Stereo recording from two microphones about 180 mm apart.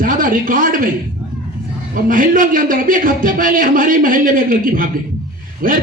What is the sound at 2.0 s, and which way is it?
A man's voice, 50° right (ahead or behind).